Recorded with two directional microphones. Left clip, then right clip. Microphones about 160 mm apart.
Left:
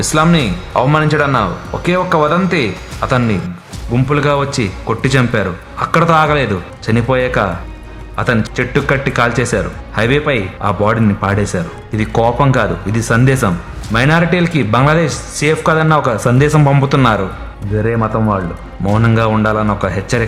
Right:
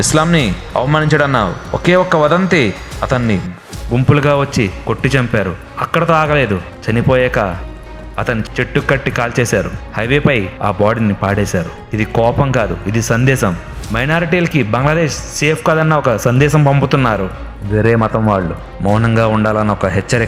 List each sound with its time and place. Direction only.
0.0 s speech: 35° right (ahead or behind)
17.7 s speech: 40° right (ahead or behind)
18.9 s speech: 25° right (ahead or behind)